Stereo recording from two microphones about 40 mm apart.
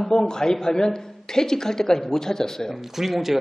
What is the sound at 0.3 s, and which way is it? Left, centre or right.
A man's voice, centre.